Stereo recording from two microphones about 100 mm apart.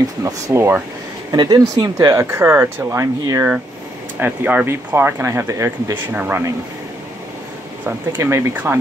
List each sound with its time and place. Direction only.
0.2 s speech: 30° right (ahead or behind)
1.3 s speech: 45° right (ahead or behind)
6.1 s speech: 15° right (ahead or behind)
7.8 s speech: 30° right (ahead or behind)